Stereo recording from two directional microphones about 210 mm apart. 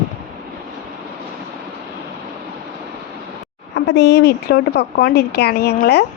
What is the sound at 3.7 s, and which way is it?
A woman's voice, 55° left (ahead or behind).